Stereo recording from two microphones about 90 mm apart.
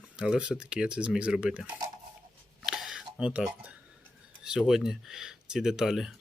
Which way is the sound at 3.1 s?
10° right (ahead or behind).